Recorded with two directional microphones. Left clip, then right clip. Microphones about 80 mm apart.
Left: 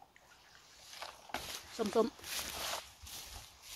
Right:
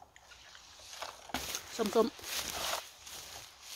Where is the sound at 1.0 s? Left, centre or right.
Right.